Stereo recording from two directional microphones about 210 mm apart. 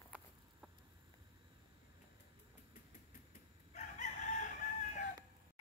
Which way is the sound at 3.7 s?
35° left (ahead or behind).